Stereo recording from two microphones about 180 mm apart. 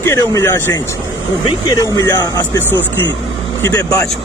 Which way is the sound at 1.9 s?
15° left (ahead or behind).